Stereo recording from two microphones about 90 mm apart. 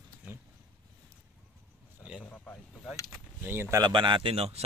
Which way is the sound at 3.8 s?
60° right (ahead or behind).